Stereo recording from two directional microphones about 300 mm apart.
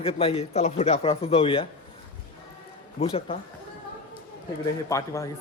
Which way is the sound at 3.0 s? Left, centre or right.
Centre.